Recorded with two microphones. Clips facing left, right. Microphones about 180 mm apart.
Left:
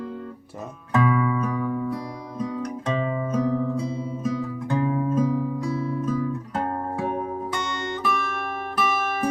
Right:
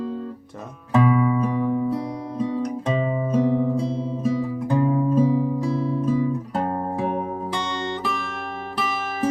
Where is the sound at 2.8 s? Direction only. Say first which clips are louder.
Right 1 dB; 15° right (ahead or behind).